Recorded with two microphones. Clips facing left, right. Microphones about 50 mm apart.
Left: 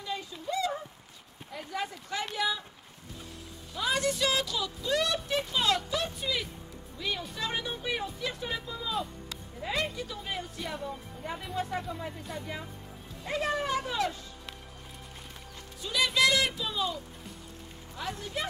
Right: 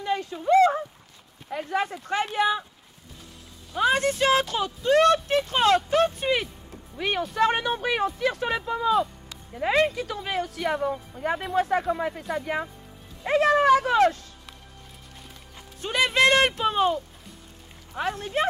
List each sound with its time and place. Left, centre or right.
0.0 s a sound: right
1.5 s speech: right
3.7 s speech: right
15.8 s speech: right